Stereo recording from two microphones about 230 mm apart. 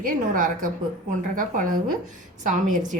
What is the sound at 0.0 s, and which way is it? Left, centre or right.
A woman's voice, right.